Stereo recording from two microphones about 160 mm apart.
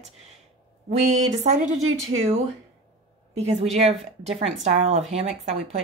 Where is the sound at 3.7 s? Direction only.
40° right (ahead or behind).